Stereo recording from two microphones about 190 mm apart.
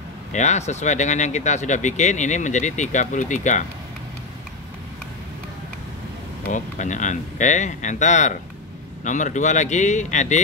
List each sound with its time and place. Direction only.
0.3 s speech: 40° left (ahead or behind)
6.5 s speech: 40° left (ahead or behind)